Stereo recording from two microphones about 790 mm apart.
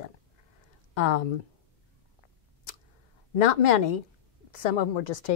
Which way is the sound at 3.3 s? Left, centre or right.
Left.